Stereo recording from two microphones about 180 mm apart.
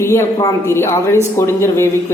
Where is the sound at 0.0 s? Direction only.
15° left (ahead or behind).